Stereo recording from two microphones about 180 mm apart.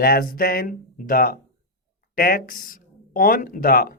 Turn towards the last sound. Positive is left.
turn(degrees=55)  # may be behind; listen again after turning